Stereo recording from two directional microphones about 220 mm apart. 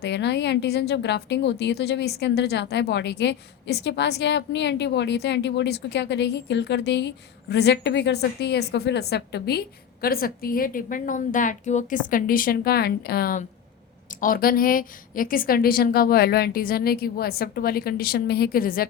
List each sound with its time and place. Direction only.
0.0 s a woman's voice: 50° left (ahead or behind)